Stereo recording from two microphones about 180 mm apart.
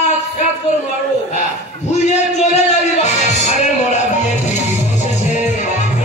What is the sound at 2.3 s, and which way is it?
Speech, 40° left (ahead or behind).